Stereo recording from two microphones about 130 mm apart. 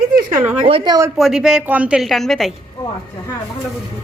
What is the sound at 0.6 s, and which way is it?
Speech, 45° right (ahead or behind).